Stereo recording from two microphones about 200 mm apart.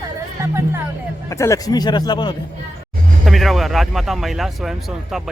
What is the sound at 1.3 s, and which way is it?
Speech, 15° left (ahead or behind).